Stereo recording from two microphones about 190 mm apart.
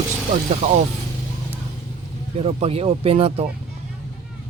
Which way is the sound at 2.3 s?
30° right (ahead or behind).